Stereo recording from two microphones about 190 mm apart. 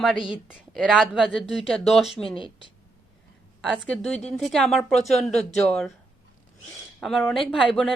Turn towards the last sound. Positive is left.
turn(degrees=0)  # may be behind; listen again after turning